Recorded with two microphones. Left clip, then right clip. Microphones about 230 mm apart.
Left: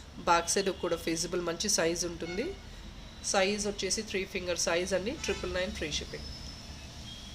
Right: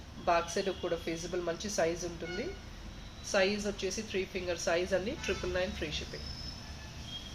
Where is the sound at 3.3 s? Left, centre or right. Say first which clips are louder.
Left 1 dB; centre.